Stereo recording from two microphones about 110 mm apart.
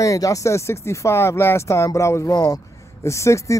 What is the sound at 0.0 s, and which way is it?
Speech, 30° left (ahead or behind).